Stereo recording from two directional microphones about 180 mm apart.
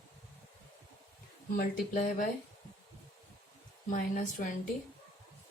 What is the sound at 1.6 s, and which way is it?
Speech, 45° left (ahead or behind).